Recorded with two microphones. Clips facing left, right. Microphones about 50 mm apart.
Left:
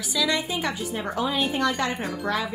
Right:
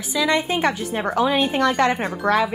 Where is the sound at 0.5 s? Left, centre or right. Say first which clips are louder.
Right 6 dB; right.